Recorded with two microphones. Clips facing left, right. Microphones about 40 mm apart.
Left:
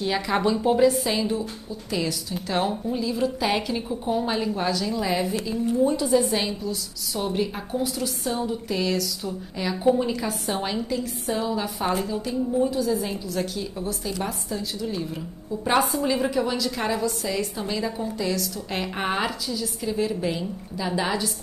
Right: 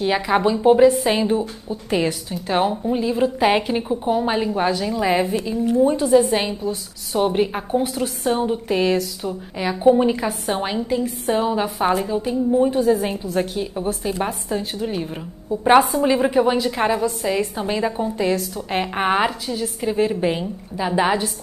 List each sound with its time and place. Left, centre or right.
0.0 s a woman's voice: right
2.4 s a woman's voice: right
2.9 s a woman's voice: right
12.6 s a woman's voice: right